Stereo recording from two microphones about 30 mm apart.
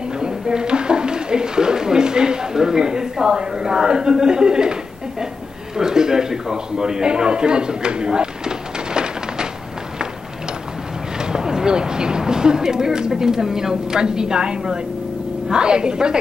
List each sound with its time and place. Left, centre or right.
0.2 s speech: right
5.8 s a man's voice: centre
11.1 s a woman's voice: right